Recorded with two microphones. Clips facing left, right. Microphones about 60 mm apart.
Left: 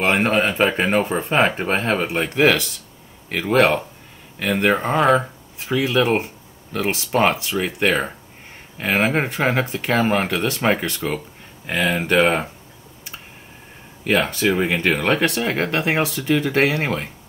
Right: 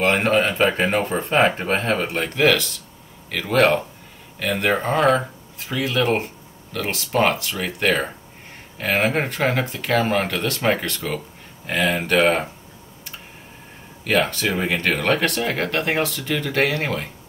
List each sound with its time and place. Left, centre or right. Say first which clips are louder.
0.0 s speech: even; centre
3.5 s speech: even; centre
14.1 s speech: left 2 dB; centre